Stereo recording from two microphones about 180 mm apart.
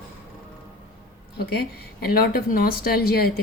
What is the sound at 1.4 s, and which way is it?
A woman's voice, 60° left (ahead or behind).